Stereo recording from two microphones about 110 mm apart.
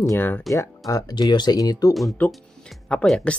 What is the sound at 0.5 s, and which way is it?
Speech, 30° left (ahead or behind).